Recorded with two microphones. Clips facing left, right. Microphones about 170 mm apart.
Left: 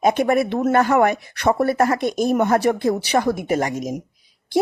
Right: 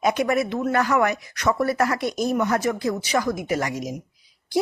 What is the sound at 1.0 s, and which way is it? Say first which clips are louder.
Speech: left 4 dB; 55° left (ahead or behind).